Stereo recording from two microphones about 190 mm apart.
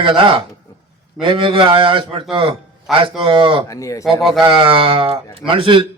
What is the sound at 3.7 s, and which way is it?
Speech, 15° left (ahead or behind).